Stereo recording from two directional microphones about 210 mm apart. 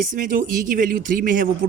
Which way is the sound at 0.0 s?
40° right (ahead or behind).